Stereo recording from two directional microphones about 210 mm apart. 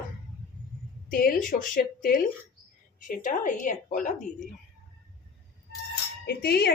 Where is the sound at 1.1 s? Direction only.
45° left (ahead or behind).